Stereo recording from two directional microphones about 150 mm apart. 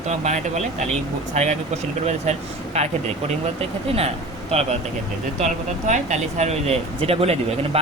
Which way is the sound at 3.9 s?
40° right (ahead or behind).